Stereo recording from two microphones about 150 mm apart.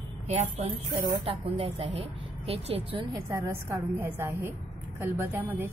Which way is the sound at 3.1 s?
20° right (ahead or behind).